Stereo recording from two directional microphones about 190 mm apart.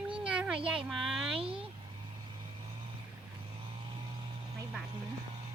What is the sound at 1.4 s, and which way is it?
Speech, 30° right (ahead or behind).